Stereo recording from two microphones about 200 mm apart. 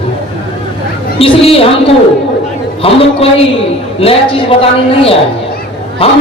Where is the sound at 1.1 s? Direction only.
30° left (ahead or behind).